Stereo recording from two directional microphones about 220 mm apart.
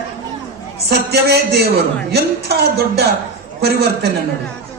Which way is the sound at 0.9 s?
50° right (ahead or behind).